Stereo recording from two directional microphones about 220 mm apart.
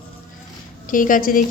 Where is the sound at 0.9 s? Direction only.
40° left (ahead or behind).